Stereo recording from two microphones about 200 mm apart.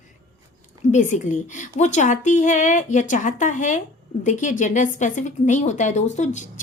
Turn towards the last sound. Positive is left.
turn(degrees=35)  # may be behind; listen again after turning